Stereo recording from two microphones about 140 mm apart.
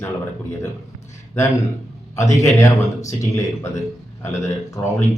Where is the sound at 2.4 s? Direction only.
20° left (ahead or behind).